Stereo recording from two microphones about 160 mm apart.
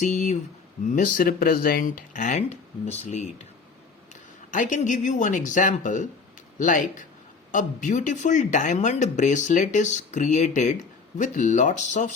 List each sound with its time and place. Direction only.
0.0 s speech: 50° left (ahead or behind)